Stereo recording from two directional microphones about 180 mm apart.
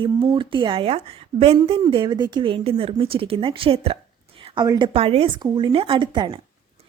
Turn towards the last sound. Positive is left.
turn(degrees=-25)  # may be behind; listen again after turning